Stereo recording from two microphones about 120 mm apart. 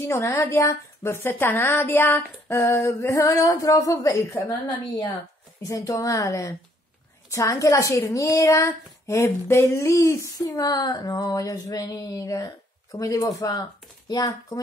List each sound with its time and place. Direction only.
0.0 s a woman's voice: 25° left (ahead or behind)
5.6 s a woman's voice: 25° left (ahead or behind)